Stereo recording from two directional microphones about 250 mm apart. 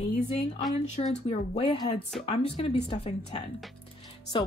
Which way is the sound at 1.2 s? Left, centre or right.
Left.